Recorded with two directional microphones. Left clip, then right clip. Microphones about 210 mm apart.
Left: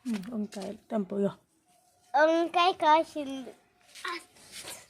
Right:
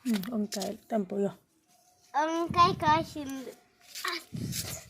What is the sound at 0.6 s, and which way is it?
Speech, centre (ahead or behind).